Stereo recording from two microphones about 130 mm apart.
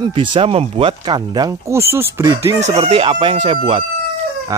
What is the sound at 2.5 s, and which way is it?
Speech, 60° right (ahead or behind).